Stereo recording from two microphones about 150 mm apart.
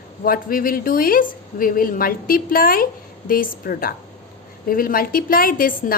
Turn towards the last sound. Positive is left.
turn(degrees=70)  # may be behind; listen again after turning